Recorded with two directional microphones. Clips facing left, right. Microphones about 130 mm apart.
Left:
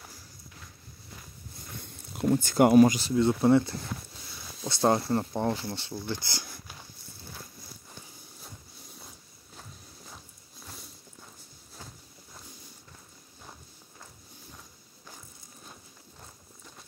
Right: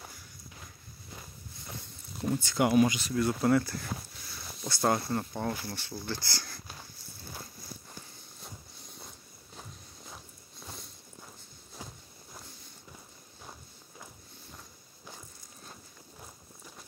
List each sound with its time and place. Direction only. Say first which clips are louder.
2.3 s speech: left 6 dB; 45° left (ahead or behind); by 6.8 s 15° left (ahead or behind)
9.6 s biting: even; centre (ahead or behind)
13.4 s walk: even; 5° right (ahead or behind)
15.6 s walk: right 1 dB; centre (ahead or behind)